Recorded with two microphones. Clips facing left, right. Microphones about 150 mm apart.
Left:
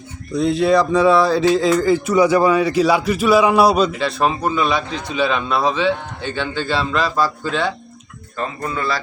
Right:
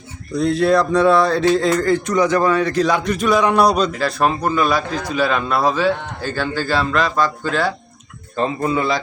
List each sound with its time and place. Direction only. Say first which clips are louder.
0.3 s speech: even; centre (ahead or behind)
8.4 s speech: right 5 dB; 25° right (ahead or behind)